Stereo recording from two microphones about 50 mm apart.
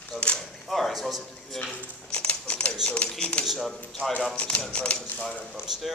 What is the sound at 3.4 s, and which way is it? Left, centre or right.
Speech, centre.